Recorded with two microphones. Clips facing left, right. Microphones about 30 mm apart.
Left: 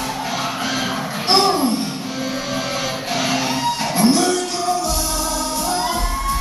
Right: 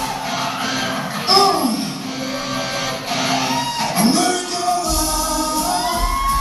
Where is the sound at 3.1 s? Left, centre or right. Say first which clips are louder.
Right 1 dB; centre.